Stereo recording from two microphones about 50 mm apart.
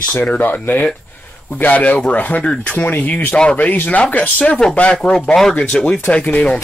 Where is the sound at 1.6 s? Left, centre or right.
Left.